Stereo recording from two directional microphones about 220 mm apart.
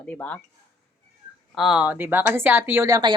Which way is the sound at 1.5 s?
Centre (ahead or behind).